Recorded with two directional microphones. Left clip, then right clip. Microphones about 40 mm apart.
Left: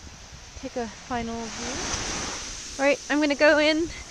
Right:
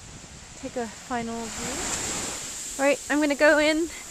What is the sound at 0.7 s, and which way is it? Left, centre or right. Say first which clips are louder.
Speech: even; centre.